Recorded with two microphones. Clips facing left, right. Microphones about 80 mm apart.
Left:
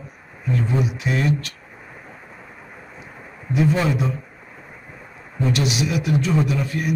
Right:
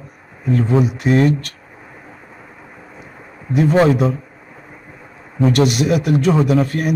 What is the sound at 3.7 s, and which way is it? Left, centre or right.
Speech, right.